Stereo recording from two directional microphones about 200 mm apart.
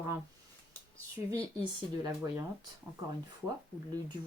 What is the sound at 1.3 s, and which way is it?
Speech, 20° right (ahead or behind).